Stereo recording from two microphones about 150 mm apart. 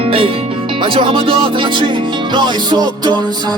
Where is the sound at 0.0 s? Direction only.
40° right (ahead or behind).